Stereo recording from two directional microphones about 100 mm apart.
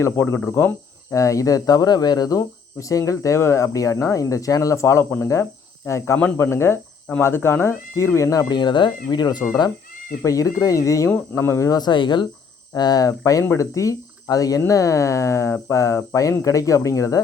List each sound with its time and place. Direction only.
0.0 s speech: 25° left (ahead or behind)
8.5 s speech: 50° left (ahead or behind)
10.2 s speech: 35° left (ahead or behind)
11.7 s speech: 45° left (ahead or behind); by 17.2 s 30° left (ahead or behind)